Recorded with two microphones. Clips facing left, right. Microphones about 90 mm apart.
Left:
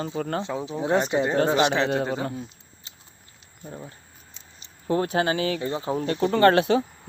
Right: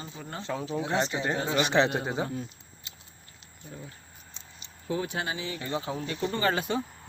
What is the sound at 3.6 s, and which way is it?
Speech, 35° left (ahead or behind).